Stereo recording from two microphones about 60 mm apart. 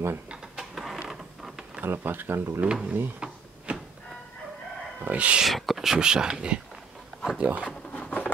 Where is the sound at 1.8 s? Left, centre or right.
Right.